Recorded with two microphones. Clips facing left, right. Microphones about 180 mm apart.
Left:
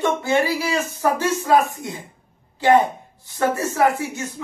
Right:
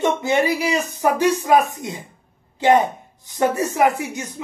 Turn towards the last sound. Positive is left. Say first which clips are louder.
# right 1 dB
turn(degrees=-15)  # may be behind; listen again after turning